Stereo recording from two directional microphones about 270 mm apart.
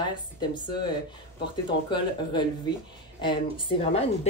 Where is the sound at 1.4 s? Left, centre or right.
Centre.